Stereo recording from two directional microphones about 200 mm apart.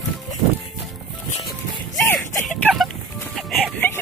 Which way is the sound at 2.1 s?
Centre (ahead or behind).